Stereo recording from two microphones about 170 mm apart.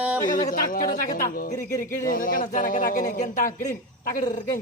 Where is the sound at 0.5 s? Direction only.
55° left (ahead or behind).